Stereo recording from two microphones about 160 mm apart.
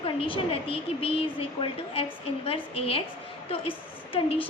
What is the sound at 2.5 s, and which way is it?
A woman's voice, 35° left (ahead or behind).